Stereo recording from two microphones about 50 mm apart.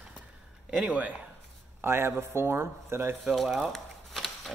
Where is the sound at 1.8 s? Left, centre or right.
Right.